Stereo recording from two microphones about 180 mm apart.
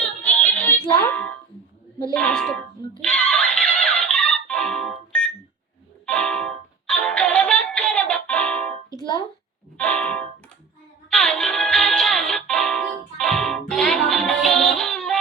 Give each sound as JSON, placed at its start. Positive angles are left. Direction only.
{"t": 0.2, "sound": "music", "side_deg": 10}
{"t": 2.1, "sound": "speech", "side_deg": 5}
{"t": 3.0, "sound": "music", "side_deg": 5}
{"t": 9.0, "sound": "music", "side_deg": 25}
{"t": 9.7, "sound": "music", "side_deg": 5}